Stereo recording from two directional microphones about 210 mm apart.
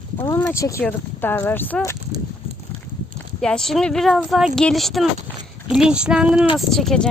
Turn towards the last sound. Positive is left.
turn(degrees=5)  # may be behind; listen again after turning